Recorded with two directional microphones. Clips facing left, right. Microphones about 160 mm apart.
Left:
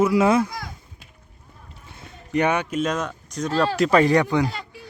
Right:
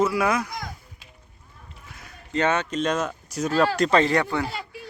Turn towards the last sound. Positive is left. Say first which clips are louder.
# right 1 dB
turn(degrees=-10)  # may be behind; listen again after turning